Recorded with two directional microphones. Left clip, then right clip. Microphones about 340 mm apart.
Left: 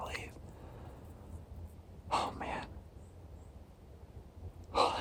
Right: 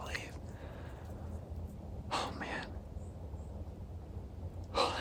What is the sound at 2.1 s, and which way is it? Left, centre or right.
Speech, centre.